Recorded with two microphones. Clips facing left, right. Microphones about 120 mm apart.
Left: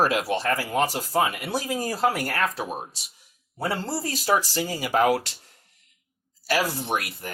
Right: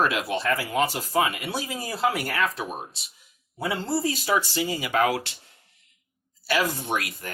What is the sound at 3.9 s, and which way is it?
Speech, 35° left (ahead or behind).